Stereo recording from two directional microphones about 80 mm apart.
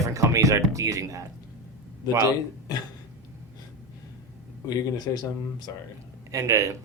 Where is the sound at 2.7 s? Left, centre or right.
Left.